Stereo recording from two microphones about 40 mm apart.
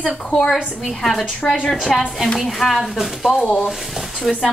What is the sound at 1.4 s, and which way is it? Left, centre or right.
Speech, centre.